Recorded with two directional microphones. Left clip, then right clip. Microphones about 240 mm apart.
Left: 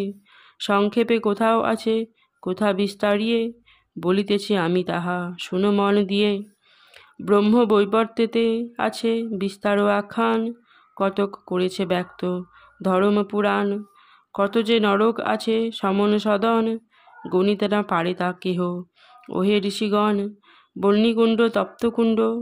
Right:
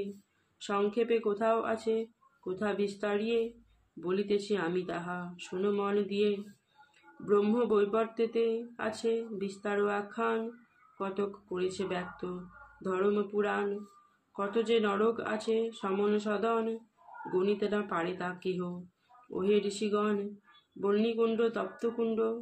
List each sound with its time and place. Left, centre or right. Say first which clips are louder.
0.6 s speech: left 10 dB; left